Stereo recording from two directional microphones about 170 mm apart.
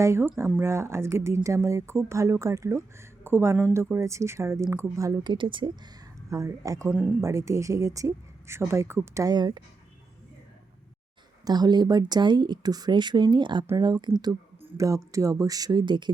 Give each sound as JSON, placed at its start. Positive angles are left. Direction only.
{"t": 0.0, "sound": "speech", "side_deg": -15}
{"t": 11.4, "sound": "speech", "side_deg": -25}